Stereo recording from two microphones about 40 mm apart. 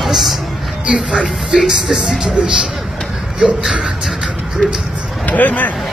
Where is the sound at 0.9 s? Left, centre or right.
Right.